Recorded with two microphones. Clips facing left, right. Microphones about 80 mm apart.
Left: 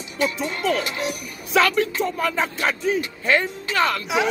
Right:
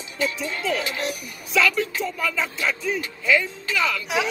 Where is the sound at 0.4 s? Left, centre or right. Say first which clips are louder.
Left 3 dB; left.